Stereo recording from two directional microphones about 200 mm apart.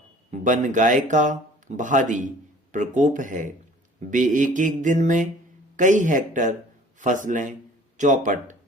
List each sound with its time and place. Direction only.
0.3 s speech: 40° right (ahead or behind)